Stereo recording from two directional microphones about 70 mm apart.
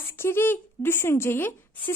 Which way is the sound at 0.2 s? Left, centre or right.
Left.